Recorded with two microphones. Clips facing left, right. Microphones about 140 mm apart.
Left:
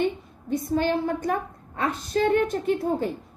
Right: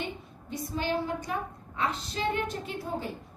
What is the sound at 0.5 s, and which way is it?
A woman's voice, 50° left (ahead or behind).